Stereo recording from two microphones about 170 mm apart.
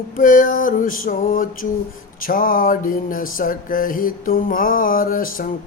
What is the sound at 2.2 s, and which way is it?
Mantra, 55° left (ahead or behind).